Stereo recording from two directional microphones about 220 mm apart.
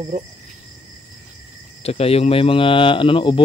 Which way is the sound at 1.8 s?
25° left (ahead or behind).